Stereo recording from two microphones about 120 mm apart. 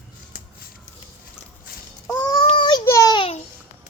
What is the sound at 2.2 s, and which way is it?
Child singing, 35° left (ahead or behind).